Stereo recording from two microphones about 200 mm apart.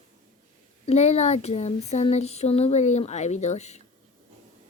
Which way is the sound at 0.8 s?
35° left (ahead or behind).